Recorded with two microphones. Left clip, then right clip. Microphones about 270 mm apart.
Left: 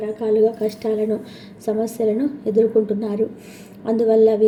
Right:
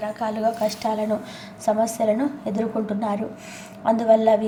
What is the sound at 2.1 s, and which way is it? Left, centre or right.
Speech, centre.